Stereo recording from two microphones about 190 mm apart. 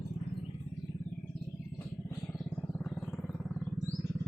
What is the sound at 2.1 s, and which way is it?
Vehicle, 5° left (ahead or behind).